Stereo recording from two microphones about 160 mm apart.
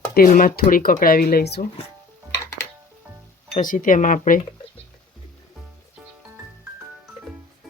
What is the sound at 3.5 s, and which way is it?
Speech, 55° left (ahead or behind).